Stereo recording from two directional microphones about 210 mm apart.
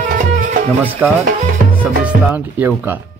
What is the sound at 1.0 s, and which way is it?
Speech, 5° right (ahead or behind).